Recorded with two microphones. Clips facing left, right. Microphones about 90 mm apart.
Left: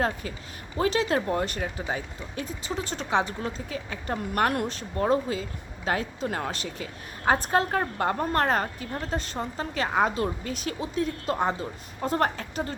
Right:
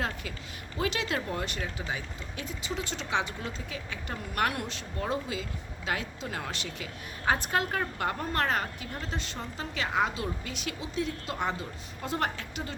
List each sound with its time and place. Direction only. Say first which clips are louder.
0.0 s speech: left 6 dB; 40° left (ahead or behind)